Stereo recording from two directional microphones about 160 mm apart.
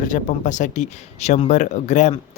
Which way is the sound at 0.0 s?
55° left (ahead or behind).